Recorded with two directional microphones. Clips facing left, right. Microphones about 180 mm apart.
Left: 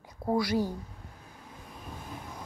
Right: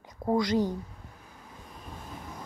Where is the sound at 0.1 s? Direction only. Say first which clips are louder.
Right 2 dB; 5° left (ahead or behind).